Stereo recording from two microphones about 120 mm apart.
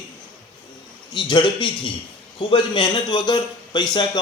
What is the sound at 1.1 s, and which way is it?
A man's voice, 40° left (ahead or behind).